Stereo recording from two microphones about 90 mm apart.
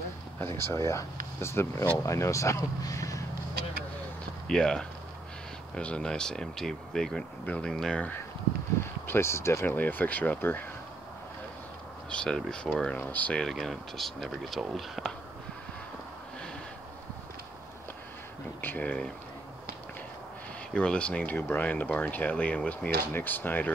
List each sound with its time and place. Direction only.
0.4 s speech: 30° left (ahead or behind)
4.5 s speech: 5° left (ahead or behind)
9.0 s speech: 25° left (ahead or behind)
12.1 s speech: 10° left (ahead or behind)
13.0 s speech: 20° left (ahead or behind)
13.4 s speech: centre (ahead or behind)
18.6 s speech: 20° left (ahead or behind)
20.7 s speech: 10° left (ahead or behind)